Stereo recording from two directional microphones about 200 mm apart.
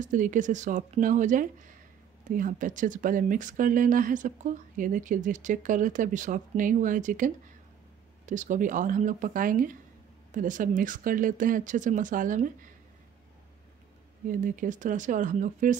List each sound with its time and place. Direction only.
0.0 s speech: 40° right (ahead or behind)
14.3 s speech: 40° right (ahead or behind)